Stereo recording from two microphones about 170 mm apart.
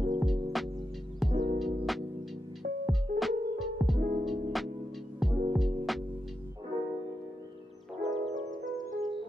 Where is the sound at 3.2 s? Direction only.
Centre (ahead or behind).